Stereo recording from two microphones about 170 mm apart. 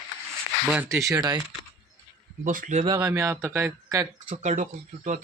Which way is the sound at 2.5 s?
50° right (ahead or behind).